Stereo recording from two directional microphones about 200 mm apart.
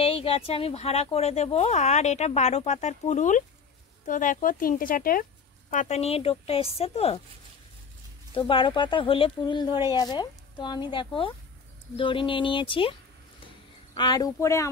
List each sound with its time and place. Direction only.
0.0 s a woman's voice: 30° left (ahead or behind)
8.4 s a woman's voice: 25° left (ahead or behind)
13.9 s speech: 20° left (ahead or behind)